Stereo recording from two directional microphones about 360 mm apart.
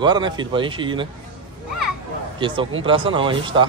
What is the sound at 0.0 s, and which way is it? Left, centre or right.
Speech, centre.